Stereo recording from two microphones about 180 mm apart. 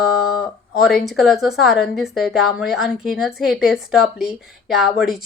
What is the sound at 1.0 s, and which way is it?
A woman's voice, centre (ahead or behind).